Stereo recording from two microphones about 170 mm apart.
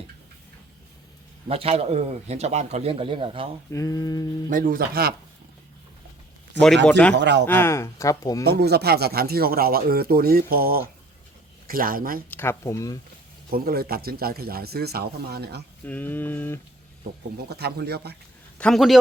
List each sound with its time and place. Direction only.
1.5 s speech: 35° right (ahead or behind)
3.7 s mantra: 20° left (ahead or behind)
4.4 s speech: 55° right (ahead or behind)
7.2 s a man's voice: 90° right
7.4 s speech: 15° left (ahead or behind)
8.4 s speech: 70° right (ahead or behind); by 12.2 s 55° right (ahead or behind)
12.3 s speech: 15° left (ahead or behind)
13.5 s speech: 65° right (ahead or behind)
15.8 s speech: 10° left (ahead or behind)
17.3 s speech: 70° right (ahead or behind)
18.6 s a man's voice: centre (ahead or behind)